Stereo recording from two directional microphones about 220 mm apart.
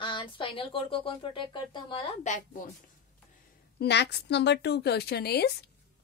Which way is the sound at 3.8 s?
50° left (ahead or behind).